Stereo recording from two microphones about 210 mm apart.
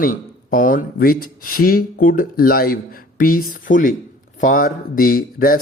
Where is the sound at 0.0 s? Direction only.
40° left (ahead or behind).